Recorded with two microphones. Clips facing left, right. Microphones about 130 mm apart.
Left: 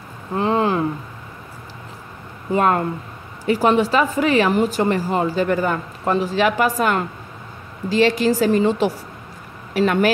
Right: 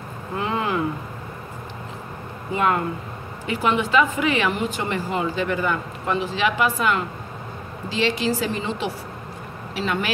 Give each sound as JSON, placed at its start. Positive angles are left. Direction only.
{"t": 0.4, "sound": "a woman's voice", "side_deg": 35}
{"t": 2.5, "sound": "a woman's voice", "side_deg": 40}